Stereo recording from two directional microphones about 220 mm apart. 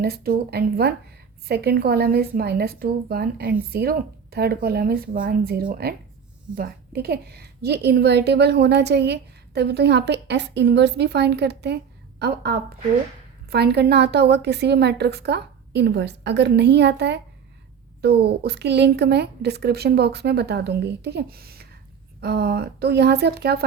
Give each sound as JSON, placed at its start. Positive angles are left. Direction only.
{"t": 0.0, "sound": "a woman's voice", "side_deg": -45}